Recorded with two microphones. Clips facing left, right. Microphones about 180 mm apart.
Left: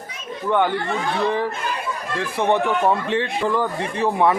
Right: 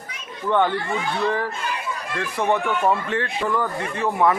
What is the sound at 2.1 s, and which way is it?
A man's voice, 25° left (ahead or behind).